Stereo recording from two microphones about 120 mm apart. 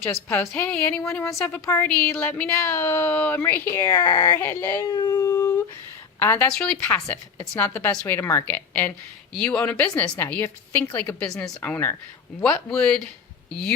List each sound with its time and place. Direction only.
0.1 s a woman's voice: 15° left (ahead or behind); by 4.4 s 30° left (ahead or behind)
4.4 s speech: 20° left (ahead or behind)
4.9 s humming: 30° left (ahead or behind)
6.1 s speech: 20° left (ahead or behind)
6.5 s a woman's voice: 5° left (ahead or behind)